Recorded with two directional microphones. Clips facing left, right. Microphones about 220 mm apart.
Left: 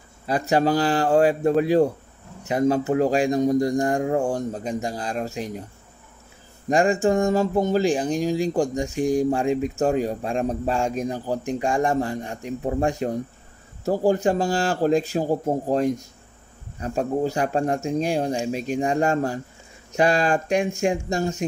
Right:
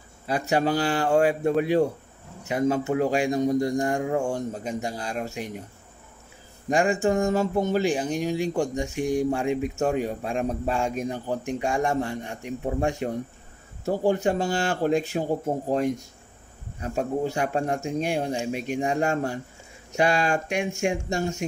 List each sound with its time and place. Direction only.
0.3 s speech: 40° left (ahead or behind)
6.7 s speech: 35° left (ahead or behind)